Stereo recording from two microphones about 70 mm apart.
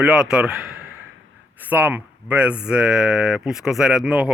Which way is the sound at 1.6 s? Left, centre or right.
Right.